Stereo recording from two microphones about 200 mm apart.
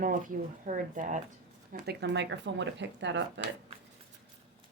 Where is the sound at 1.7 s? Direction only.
55° right (ahead or behind).